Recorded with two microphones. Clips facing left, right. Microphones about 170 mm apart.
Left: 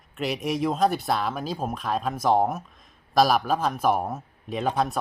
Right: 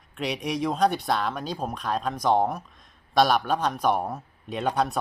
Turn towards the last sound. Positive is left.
turn(degrees=0)  # may be behind; listen again after turning